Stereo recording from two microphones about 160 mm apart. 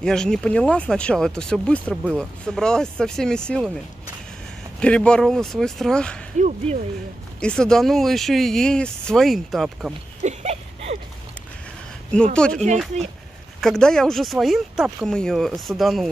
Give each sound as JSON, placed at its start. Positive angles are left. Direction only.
{"t": 0.0, "sound": "speech", "side_deg": 5}
{"t": 4.7, "sound": "speech", "side_deg": 5}
{"t": 6.4, "sound": "speech", "side_deg": -45}
{"t": 7.3, "sound": "speech", "side_deg": 5}
{"t": 10.2, "sound": "a sound", "side_deg": -40}
{"t": 12.4, "sound": "speech", "side_deg": 5}
{"t": 12.9, "sound": "speech", "side_deg": -45}
{"t": 13.6, "sound": "speech", "side_deg": 5}